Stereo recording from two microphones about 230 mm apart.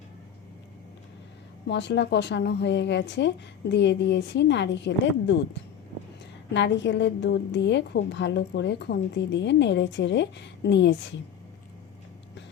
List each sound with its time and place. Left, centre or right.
1.6 s a woman's voice: left
6.5 s a woman's voice: left